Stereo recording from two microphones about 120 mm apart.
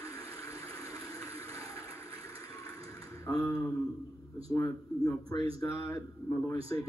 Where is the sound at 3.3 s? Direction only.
30° left (ahead or behind).